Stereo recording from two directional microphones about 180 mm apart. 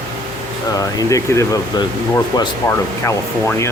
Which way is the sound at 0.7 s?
20° left (ahead or behind).